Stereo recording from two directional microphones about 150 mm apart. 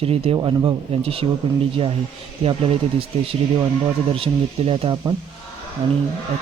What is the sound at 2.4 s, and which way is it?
Speech, 40° right (ahead or behind).